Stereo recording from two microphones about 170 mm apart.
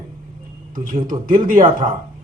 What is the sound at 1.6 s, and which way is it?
Speech, 30° right (ahead or behind).